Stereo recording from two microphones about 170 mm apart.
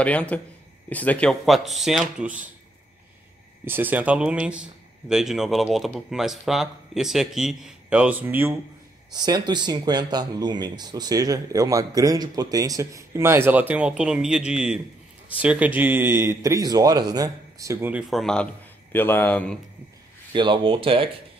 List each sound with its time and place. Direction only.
0.0 s speech: 10° left (ahead or behind)
3.6 s speech: 10° right (ahead or behind)
9.1 s a man's voice: 25° right (ahead or behind)
18.1 s a man's voice: 5° left (ahead or behind)
20.3 s speech: 25° right (ahead or behind)